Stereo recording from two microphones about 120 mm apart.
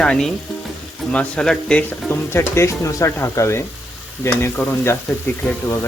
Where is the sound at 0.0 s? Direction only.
5° left (ahead or behind).